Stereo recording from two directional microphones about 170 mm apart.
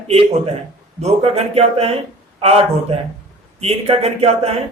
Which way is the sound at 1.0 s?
40° right (ahead or behind).